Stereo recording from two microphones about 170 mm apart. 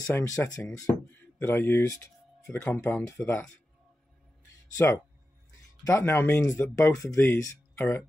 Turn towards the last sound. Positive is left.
turn(degrees=15)  # may be behind; listen again after turning